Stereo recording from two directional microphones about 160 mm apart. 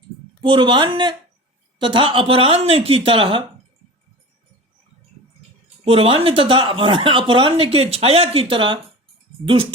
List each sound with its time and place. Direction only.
0.4 s a woman's voice: 30° right (ahead or behind)
5.8 s speech: 35° right (ahead or behind)